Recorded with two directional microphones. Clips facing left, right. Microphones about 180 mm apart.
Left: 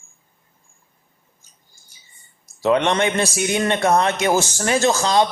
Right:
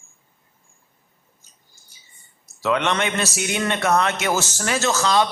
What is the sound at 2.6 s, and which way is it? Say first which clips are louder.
A man's voice: left 4 dB; 30° left (ahead or behind).